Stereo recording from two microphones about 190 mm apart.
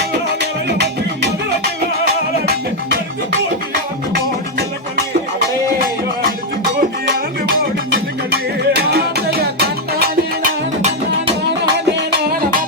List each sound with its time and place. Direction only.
0.7 s music: 60° right (ahead or behind)
7.0 s music: 70° right (ahead or behind)